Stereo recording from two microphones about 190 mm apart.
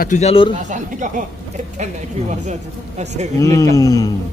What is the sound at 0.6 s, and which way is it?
Speech, 40° right (ahead or behind).